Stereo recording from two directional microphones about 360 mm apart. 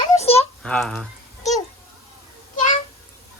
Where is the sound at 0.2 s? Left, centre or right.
Centre.